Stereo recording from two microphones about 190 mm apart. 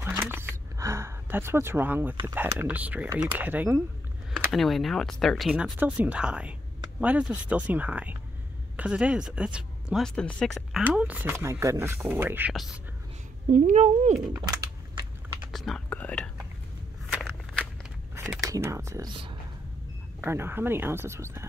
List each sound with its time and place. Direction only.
0.0 s a sound: 10° right (ahead or behind)
2.2 s speech: 10° right (ahead or behind)
4.5 s speech: centre (ahead or behind)
13.5 s speech: 40° right (ahead or behind)
14.3 s a sound: 20° right (ahead or behind)
15.5 s speech: centre (ahead or behind)
17.1 s walk: centre (ahead or behind)
18.4 s speech: 15° right (ahead or behind)
20.2 s speech: 10° right (ahead or behind)